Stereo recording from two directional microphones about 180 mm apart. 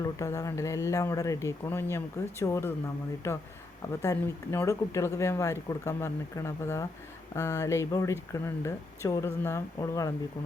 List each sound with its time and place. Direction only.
0.0 s speech: 20° left (ahead or behind)